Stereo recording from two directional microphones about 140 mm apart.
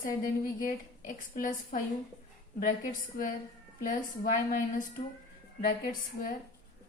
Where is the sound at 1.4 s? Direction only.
75° left (ahead or behind).